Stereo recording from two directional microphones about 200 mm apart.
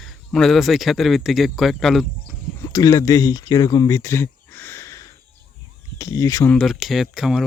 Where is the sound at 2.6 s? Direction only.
20° left (ahead or behind).